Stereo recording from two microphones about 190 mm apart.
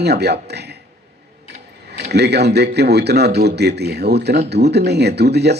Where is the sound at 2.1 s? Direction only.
60° right (ahead or behind).